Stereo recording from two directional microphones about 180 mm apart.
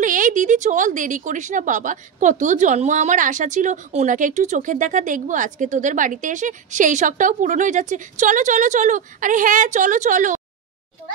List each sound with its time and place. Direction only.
0.0 s a woman's voice: 45° right (ahead or behind)